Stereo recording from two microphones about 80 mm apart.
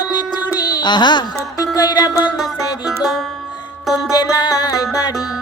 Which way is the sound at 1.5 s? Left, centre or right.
Left.